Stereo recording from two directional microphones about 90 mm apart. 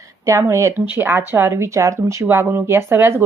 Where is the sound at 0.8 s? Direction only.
20° right (ahead or behind).